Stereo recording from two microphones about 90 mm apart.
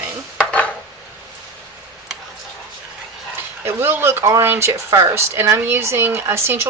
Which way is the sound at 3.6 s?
25° right (ahead or behind).